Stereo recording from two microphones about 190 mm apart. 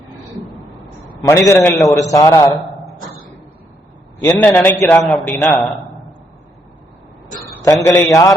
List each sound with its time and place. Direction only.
1.1 s a man's voice: 20° left (ahead or behind)
1.8 s a man's voice: centre (ahead or behind)
2.1 s a man's voice: 15° left (ahead or behind)
4.2 s a man's voice: 10° left (ahead or behind)
7.4 s a man's voice: 15° left (ahead or behind)